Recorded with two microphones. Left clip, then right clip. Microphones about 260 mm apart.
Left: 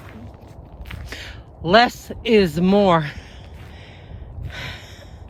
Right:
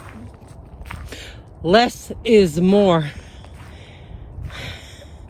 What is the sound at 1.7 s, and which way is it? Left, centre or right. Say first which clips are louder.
Speech: left 1 dB; centre.